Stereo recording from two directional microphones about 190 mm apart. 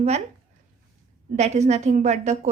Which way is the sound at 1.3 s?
35° right (ahead or behind).